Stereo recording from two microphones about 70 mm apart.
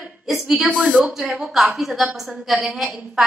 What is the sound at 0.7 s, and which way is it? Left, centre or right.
Speech, right.